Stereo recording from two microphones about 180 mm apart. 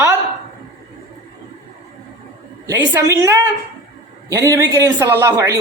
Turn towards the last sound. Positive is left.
turn(degrees=-15)  # may be behind; listen again after turning